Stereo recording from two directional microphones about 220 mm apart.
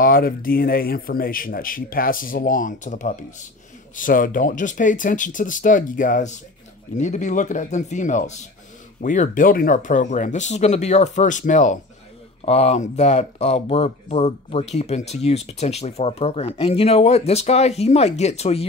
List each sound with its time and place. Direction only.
0.0 s speech: 40° left (ahead or behind)